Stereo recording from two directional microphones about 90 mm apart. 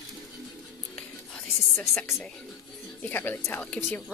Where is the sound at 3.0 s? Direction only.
25° left (ahead or behind).